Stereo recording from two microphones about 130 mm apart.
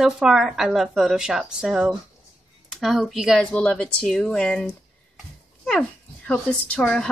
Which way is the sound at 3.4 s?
10° left (ahead or behind).